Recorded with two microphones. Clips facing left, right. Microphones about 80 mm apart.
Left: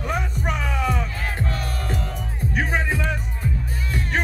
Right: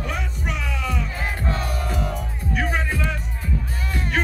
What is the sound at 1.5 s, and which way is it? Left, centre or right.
Music, right.